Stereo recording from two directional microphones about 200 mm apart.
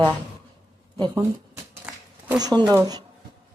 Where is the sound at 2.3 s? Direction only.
20° right (ahead or behind).